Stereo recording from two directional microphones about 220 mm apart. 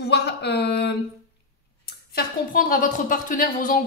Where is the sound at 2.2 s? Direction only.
40° left (ahead or behind).